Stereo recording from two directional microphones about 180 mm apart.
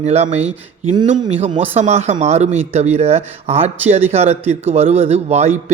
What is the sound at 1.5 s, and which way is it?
Speech, 30° right (ahead or behind).